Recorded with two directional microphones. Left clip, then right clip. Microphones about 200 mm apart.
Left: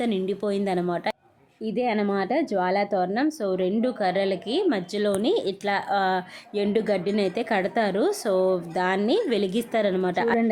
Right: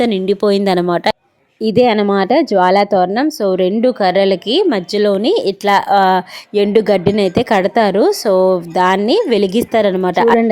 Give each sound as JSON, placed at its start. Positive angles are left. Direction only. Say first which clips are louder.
{"t": 0.0, "sound": "speech", "louder": "right 12 dB", "side_deg": -40}